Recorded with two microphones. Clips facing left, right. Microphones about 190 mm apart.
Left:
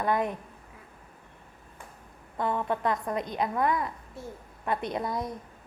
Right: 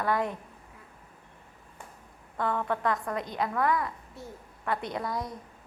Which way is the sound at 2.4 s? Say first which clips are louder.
Left 1 dB; 20° left (ahead or behind).